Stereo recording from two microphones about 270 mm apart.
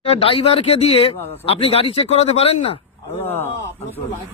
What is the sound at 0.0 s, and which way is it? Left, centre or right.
A man's voice, left.